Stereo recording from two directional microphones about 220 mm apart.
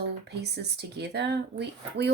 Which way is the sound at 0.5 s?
50° right (ahead or behind).